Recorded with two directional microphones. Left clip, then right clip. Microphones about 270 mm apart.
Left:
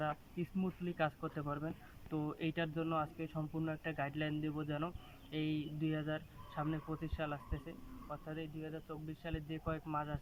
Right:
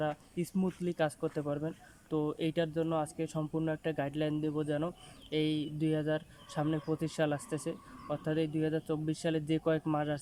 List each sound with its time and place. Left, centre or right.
0.0 s speech: right